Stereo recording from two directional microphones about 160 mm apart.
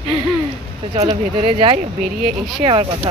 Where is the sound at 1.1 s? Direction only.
35° right (ahead or behind).